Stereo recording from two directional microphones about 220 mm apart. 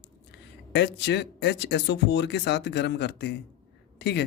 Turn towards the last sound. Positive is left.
turn(degrees=50)  # may be behind; listen again after turning